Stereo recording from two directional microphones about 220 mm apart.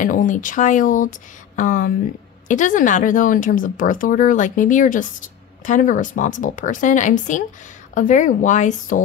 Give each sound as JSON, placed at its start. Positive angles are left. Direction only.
{"t": 0.0, "sound": "speech", "side_deg": 35}